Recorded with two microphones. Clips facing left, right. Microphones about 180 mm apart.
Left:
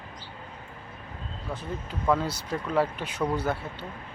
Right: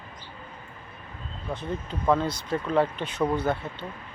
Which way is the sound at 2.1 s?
5° left (ahead or behind).